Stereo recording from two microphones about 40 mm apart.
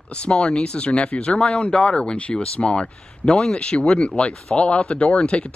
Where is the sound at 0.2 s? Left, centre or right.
Left.